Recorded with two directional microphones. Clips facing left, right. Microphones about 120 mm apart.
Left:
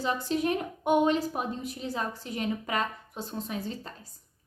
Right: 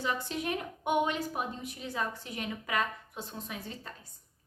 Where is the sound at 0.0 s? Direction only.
35° left (ahead or behind).